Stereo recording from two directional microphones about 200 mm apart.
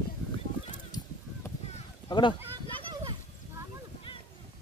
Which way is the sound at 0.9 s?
20° left (ahead or behind).